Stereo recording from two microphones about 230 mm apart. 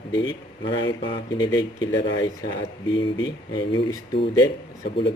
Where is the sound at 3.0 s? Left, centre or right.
Centre.